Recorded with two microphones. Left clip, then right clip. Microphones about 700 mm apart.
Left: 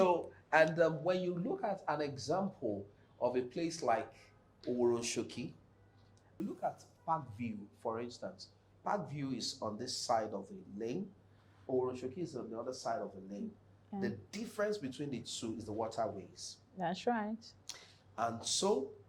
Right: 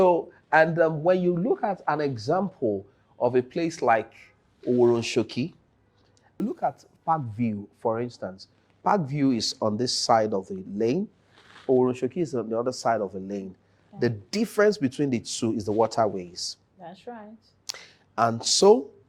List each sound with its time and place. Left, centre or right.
0.0 s speech: right
6.6 s speech: right
11.6 s speech: right
16.8 s speech: left
17.7 s speech: right